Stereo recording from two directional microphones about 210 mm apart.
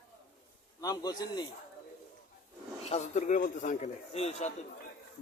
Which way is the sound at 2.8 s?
30° left (ahead or behind).